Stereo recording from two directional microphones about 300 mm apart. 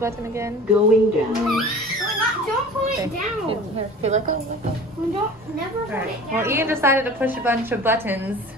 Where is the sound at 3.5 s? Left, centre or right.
Right.